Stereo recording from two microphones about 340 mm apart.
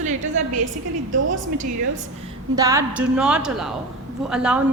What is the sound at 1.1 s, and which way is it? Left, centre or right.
Speech, right.